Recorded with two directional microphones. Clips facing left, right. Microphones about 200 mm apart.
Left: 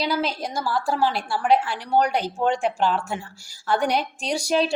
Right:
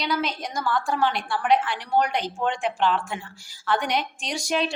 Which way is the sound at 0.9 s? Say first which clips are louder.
Left 1 dB; 30° left (ahead or behind).